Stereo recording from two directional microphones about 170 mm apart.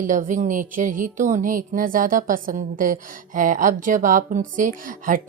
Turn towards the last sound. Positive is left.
turn(degrees=-55)  # may be behind; listen again after turning